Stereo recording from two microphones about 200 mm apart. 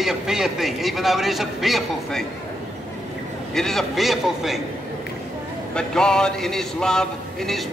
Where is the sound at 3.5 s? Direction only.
Centre (ahead or behind).